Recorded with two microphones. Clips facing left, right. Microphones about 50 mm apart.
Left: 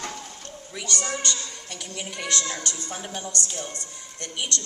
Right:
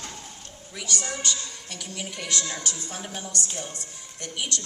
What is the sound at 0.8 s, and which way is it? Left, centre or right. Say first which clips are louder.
A woman's voice: left 2 dB; centre.